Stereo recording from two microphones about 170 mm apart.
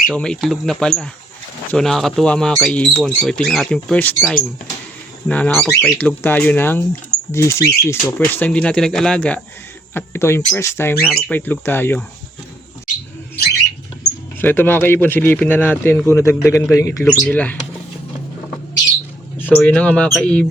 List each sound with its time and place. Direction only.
0.1 s speech: 5° left (ahead or behind)
14.4 s speech: 10° left (ahead or behind)
17.1 s speech: 5° left (ahead or behind)
19.4 s speech: 10° left (ahead or behind)